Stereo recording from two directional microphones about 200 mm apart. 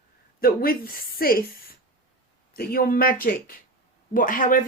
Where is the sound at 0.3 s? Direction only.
50° left (ahead or behind).